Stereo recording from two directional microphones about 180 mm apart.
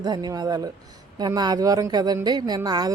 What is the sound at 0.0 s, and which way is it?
A woman's voice, 20° right (ahead or behind).